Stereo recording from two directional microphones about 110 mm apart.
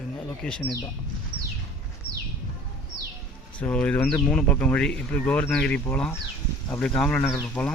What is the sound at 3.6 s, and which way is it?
Speech, 10° left (ahead or behind).